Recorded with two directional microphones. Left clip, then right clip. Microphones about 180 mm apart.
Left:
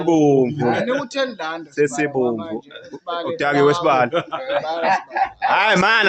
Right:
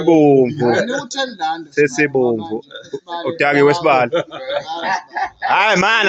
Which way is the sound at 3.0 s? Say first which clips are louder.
Left 2 dB; 20° left (ahead or behind).